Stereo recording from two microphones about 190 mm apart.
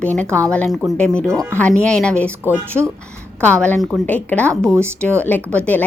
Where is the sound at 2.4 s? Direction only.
10° right (ahead or behind).